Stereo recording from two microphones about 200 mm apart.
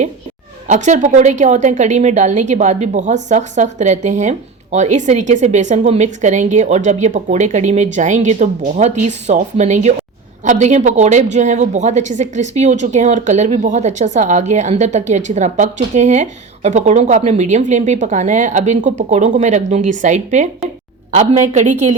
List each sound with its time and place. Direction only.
0.7 s a woman's voice: 35° right (ahead or behind)